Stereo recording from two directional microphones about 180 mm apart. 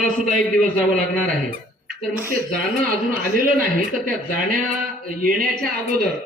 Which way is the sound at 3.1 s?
50° right (ahead or behind).